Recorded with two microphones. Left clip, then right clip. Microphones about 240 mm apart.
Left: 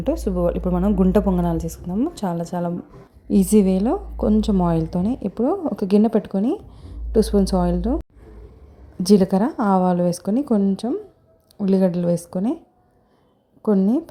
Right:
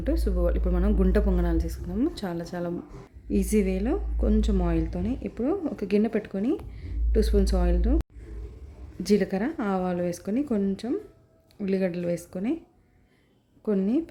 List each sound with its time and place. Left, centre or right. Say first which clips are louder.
0.0 s a woman's voice: left 7 dB; centre
6.7 s a sound: left 8 dB; centre
7.6 s a woman's voice: left 7 dB; centre
9.0 s a woman's voice: left 8 dB; centre